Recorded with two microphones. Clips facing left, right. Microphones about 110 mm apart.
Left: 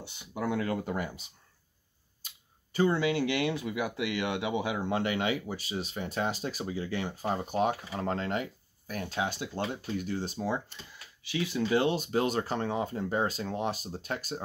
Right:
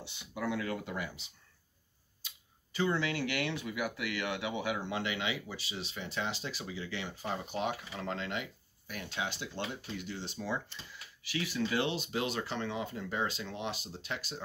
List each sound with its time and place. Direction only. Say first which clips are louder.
0.5 s speech: left 5 dB; 40° left (ahead or behind)
2.2 s a sound: left 1 dB; 45° left (ahead or behind)
3.0 s speech: left 6 dB; 20° left (ahead or behind)
3.5 s speech: left 5 dB; 40° left (ahead or behind)
3.8 s speech: left 4 dB; 25° left (ahead or behind)
4.8 s speech: left 6 dB; 45° left (ahead or behind)
11.2 s speech: left 4 dB; 20° left (ahead or behind)
11.8 s speech: left 6 dB; 45° left (ahead or behind)